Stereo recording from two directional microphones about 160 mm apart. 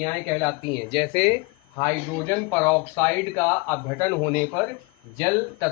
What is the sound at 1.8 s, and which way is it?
A man's voice, 15° left (ahead or behind).